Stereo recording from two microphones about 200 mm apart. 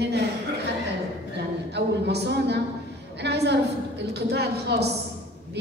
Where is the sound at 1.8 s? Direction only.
60° right (ahead or behind).